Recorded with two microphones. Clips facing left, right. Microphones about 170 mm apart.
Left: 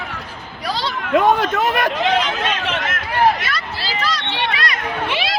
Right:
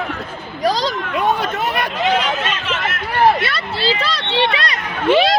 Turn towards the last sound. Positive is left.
turn(degrees=-40)  # may be behind; listen again after turning